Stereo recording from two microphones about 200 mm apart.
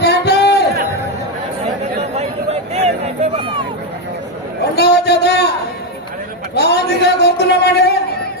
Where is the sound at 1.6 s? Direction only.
35° right (ahead or behind).